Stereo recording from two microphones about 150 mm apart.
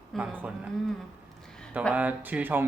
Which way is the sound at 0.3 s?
10° right (ahead or behind).